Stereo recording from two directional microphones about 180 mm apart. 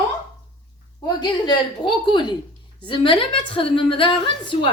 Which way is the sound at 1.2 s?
25° left (ahead or behind).